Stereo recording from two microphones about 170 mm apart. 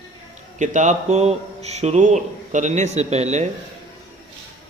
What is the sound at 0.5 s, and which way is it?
A man's voice, 45° right (ahead or behind).